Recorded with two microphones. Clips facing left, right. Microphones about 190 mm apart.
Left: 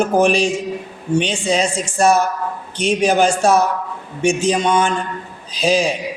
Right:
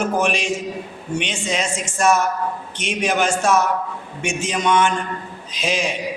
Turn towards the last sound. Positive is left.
turn(degrees=35)  # may be behind; listen again after turning